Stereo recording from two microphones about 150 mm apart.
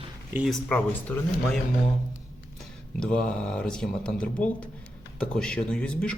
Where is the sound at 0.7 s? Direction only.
10° left (ahead or behind).